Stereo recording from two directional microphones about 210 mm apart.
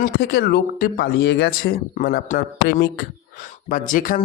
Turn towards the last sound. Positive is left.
turn(degrees=40)  # may be behind; listen again after turning